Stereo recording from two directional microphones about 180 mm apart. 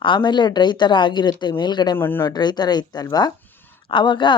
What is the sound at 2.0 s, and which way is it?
Speech, 15° left (ahead or behind).